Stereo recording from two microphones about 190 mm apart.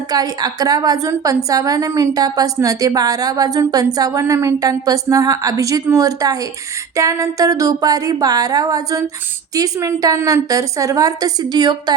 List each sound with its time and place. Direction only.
0.1 s a woman's voice: 20° right (ahead or behind)